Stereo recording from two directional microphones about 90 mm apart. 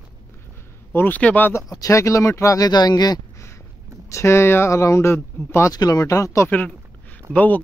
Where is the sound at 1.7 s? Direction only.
40° left (ahead or behind).